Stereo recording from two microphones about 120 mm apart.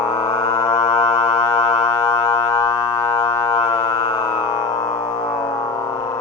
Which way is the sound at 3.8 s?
45° left (ahead or behind).